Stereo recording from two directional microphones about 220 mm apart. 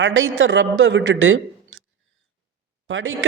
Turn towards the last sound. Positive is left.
turn(degrees=-65)  # may be behind; listen again after turning